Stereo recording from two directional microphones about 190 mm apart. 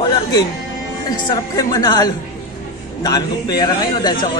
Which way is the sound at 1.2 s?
20° left (ahead or behind).